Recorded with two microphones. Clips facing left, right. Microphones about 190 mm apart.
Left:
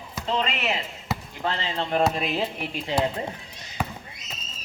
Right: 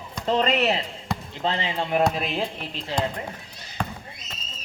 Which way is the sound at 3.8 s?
5° left (ahead or behind).